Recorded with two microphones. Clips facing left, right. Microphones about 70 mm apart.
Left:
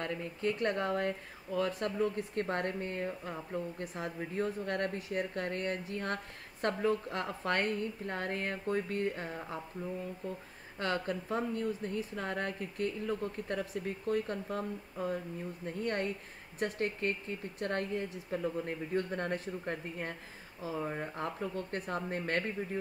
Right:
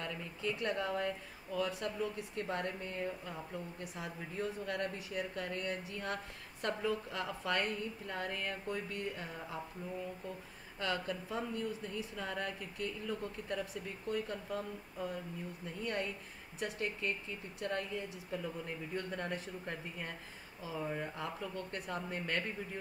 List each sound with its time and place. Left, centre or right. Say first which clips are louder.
0.0 s speech: left 5 dB; left
10.8 s speech: left 3 dB; left
20.7 s speech: left 2 dB; left